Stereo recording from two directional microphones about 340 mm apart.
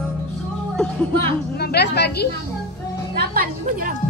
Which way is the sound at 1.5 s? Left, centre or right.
Left.